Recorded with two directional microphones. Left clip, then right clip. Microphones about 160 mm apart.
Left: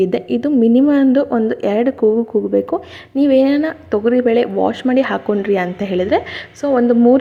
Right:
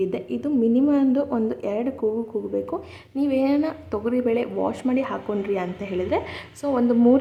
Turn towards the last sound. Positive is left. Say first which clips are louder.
# left 7 dB
turn(degrees=20)  # may be behind; listen again after turning